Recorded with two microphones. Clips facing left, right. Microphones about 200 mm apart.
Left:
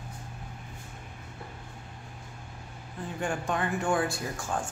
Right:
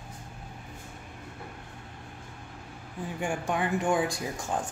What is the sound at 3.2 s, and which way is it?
Speech, 10° right (ahead or behind).